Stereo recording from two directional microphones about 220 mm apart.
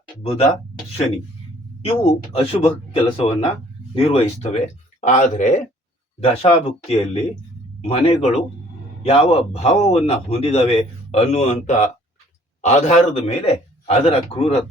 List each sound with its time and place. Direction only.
1.8 s a man's voice: 25° left (ahead or behind)